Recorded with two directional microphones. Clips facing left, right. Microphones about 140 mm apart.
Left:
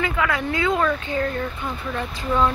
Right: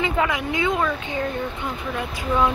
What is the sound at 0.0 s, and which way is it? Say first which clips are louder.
Speech: right 1 dB; 20° right (ahead or behind).